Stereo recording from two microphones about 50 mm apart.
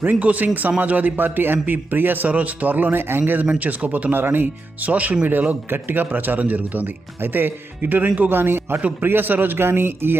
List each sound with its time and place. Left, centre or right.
0.0 s a man's voice: right